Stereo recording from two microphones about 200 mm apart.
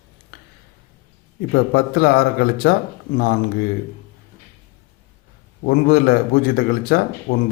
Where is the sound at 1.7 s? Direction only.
50° left (ahead or behind).